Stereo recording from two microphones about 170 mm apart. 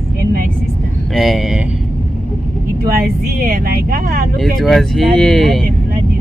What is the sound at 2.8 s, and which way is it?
Speech, 60° right (ahead or behind).